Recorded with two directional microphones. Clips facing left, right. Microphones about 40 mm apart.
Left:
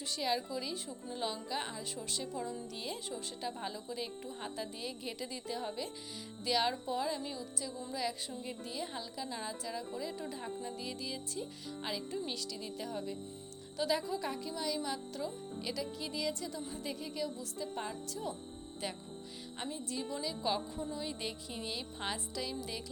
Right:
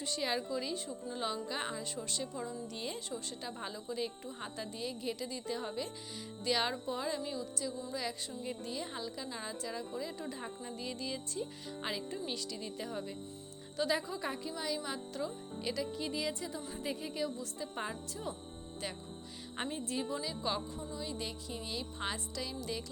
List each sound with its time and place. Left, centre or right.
0.0 s speech: centre
19.7 s speech: right
20.2 s speech: centre